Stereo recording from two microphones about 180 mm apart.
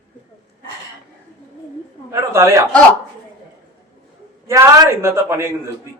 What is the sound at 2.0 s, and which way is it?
Speech, 15° right (ahead or behind).